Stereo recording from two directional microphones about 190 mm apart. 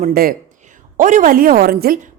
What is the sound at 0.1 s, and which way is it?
A woman's voice, 55° right (ahead or behind).